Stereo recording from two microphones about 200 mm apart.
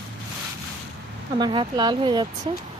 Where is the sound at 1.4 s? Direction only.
20° right (ahead or behind).